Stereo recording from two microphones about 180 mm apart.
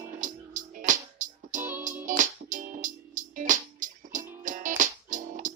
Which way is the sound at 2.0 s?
45° right (ahead or behind).